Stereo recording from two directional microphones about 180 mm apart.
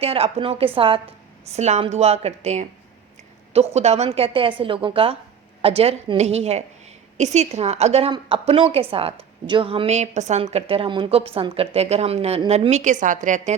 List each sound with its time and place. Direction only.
0.0 s a woman's voice: 35° right (ahead or behind)